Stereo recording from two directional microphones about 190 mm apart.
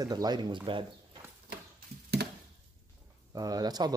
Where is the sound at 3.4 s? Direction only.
20° right (ahead or behind).